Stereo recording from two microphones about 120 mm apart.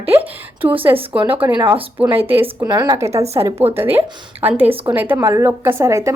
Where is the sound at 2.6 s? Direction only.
30° right (ahead or behind).